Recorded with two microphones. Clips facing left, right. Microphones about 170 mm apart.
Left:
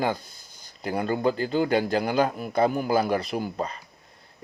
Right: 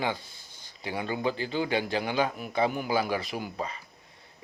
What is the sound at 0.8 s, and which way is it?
A man's voice, 45° left (ahead or behind).